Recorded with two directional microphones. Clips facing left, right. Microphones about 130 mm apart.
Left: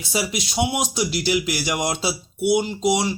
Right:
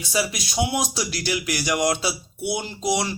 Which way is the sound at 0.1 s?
20° left (ahead or behind).